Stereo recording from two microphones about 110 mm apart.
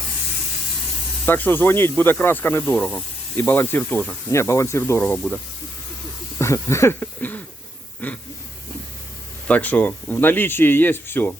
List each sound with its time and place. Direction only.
1.2 s speech: 20° left (ahead or behind)
4.3 s speech: 25° left (ahead or behind)
6.4 s a sound: 25° left (ahead or behind)
8.0 s speech: 15° left (ahead or behind)
9.5 s speech: 15° left (ahead or behind)